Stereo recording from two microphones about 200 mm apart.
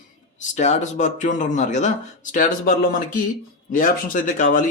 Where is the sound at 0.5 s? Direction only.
35° left (ahead or behind).